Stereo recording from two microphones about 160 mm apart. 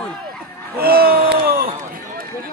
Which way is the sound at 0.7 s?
75° right (ahead or behind).